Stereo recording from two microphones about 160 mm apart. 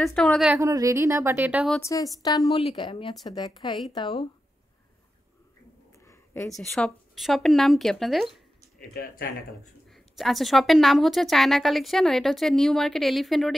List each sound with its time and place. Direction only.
0.0 s a woman's voice: 5° left (ahead or behind)
0.6 s speech: 20° right (ahead or behind)
1.8 s a woman's voice: 20° left (ahead or behind)
6.0 s a sound: 20° left (ahead or behind)
6.5 s a woman's voice: centre (ahead or behind)
8.9 s speech: 65° left (ahead or behind)
9.8 s a woman's voice: centre (ahead or behind)